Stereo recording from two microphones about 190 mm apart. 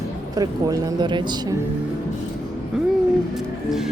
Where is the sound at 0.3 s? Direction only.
20° right (ahead or behind).